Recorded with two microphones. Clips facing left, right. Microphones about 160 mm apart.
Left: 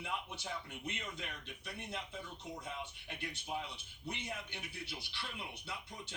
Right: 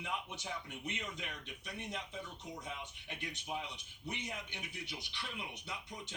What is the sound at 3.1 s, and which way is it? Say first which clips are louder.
Speech: right 1 dB; 15° right (ahead or behind).